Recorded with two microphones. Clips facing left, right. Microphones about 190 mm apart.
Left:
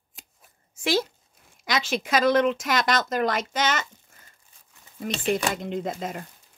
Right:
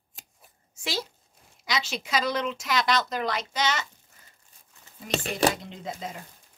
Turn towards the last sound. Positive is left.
turn(degrees=55)  # may be behind; listen again after turning